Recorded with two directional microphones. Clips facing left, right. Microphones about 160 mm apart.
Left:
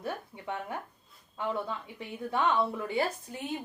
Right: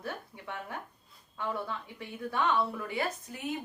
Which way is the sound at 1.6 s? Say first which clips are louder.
Left 1 dB; 20° left (ahead or behind).